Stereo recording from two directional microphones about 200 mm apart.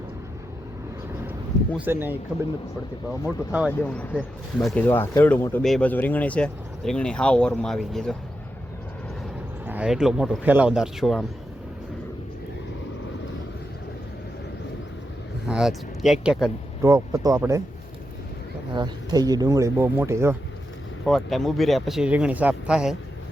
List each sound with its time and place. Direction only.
1.7 s speech: 10° right (ahead or behind)
3.2 s speech: 5° right (ahead or behind)
3.7 s speech: 5° left (ahead or behind)
9.6 s speech: 5° right (ahead or behind)
15.4 s speech: 5° right (ahead or behind)
16.8 s speech: 15° right (ahead or behind)
18.7 s speech: 20° right (ahead or behind)
21.0 s speech: centre (ahead or behind)